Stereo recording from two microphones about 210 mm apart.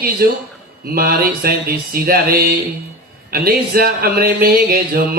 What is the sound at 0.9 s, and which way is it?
Speech, 45° right (ahead or behind).